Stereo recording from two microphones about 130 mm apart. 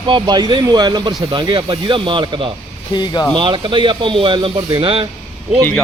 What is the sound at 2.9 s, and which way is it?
Speech, 35° left (ahead or behind).